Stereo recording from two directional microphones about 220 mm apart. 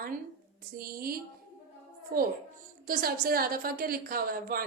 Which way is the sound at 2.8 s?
40° right (ahead or behind).